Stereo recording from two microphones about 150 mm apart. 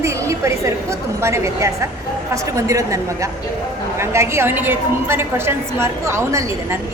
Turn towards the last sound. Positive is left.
turn(degrees=-20)  # may be behind; listen again after turning